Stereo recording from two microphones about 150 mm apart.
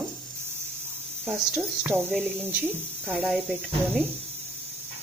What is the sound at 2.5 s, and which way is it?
Speech, 15° right (ahead or behind).